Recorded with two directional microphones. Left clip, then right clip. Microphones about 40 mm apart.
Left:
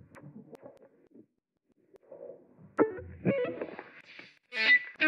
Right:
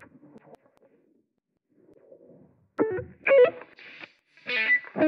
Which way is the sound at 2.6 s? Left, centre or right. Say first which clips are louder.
Right 2 dB; centre.